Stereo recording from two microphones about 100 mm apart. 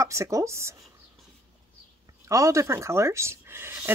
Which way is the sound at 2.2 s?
30° right (ahead or behind).